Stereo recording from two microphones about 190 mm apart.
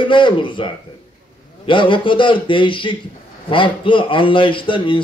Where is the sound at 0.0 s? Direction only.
25° left (ahead or behind).